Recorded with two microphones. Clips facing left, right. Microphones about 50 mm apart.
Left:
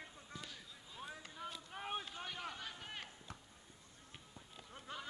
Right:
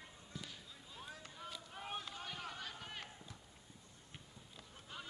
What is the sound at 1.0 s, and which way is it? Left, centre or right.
Vehicle, centre.